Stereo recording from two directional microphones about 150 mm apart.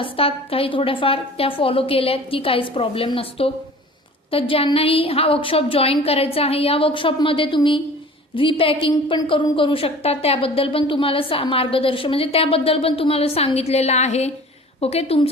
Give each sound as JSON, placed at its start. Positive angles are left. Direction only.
{"t": 0.0, "sound": "a woman's voice", "side_deg": 40}